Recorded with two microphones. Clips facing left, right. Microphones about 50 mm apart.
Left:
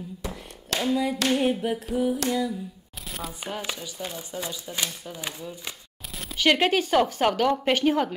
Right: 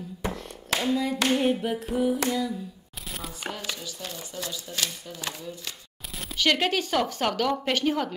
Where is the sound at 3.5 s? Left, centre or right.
Centre.